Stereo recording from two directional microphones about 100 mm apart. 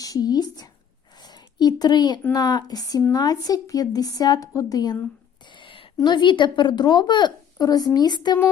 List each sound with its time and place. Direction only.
0.0 s a woman's voice: 40° left (ahead or behind)
5.5 s a sound: 55° left (ahead or behind)
6.0 s a woman's voice: 50° left (ahead or behind)